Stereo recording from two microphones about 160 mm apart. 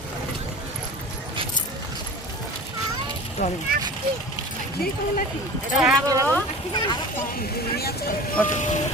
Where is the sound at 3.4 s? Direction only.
50° left (ahead or behind).